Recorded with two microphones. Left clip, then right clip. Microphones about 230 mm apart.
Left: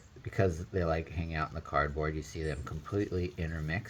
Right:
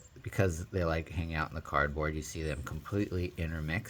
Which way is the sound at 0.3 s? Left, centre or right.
Right.